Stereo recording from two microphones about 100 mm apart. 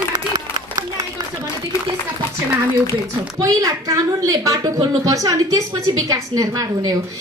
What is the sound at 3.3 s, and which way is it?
A woman's voice, 35° right (ahead or behind).